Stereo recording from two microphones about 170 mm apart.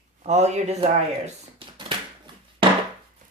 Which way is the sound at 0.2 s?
40° right (ahead or behind).